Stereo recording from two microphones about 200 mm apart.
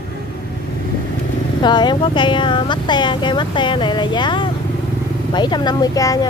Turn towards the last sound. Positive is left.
turn(degrees=20)  # may be behind; listen again after turning